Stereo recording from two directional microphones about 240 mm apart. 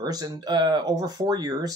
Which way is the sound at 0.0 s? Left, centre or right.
Centre.